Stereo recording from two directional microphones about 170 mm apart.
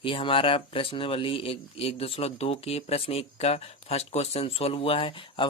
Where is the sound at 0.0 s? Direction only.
30° left (ahead or behind).